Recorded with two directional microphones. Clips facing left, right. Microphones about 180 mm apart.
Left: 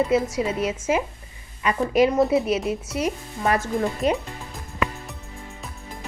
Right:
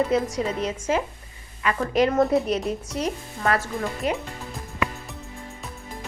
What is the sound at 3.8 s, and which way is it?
Speech, 20° left (ahead or behind).